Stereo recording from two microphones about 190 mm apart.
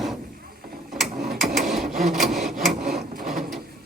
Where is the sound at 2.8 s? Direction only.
50° right (ahead or behind).